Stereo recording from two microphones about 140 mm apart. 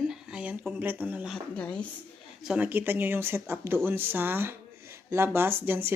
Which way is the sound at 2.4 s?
10° right (ahead or behind).